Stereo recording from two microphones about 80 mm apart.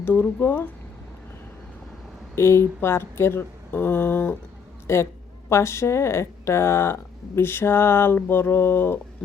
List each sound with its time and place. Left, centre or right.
0.0 s speech: left
2.3 s speech: left